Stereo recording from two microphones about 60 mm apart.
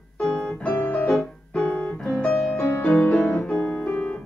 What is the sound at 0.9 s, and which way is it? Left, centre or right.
Music, left.